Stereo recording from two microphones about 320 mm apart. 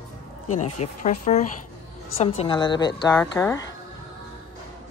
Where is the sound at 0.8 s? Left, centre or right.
Centre.